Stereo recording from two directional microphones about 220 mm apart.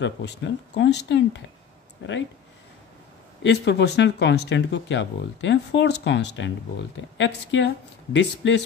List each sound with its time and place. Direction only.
0.0 s speech: 55° left (ahead or behind)
3.4 s speech: 50° left (ahead or behind)